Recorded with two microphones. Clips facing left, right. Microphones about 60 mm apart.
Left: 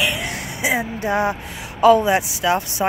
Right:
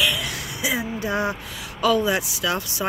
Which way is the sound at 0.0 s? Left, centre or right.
Left.